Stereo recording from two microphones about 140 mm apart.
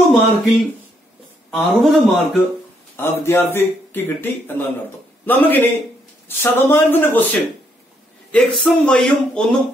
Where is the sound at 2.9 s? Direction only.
15° left (ahead or behind).